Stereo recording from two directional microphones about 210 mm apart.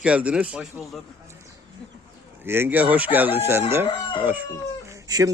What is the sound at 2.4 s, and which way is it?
Speech, 10° right (ahead or behind).